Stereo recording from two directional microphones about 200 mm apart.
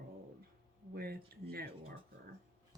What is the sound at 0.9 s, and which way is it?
Speech, 50° right (ahead or behind).